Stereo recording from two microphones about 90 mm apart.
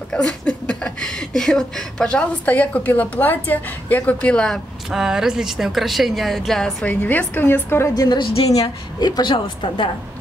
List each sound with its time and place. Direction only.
0.1 s speech: 5° left (ahead or behind)
4.9 s speech: 5° right (ahead or behind)
6.9 s a woman's voice: 20° left (ahead or behind)
7.9 s a woman's voice: 50° left (ahead or behind)